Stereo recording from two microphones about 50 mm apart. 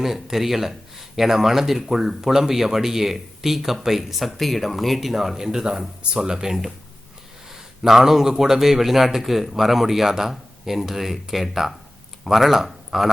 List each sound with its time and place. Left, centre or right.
0.0 s speech: centre
7.8 s speech: centre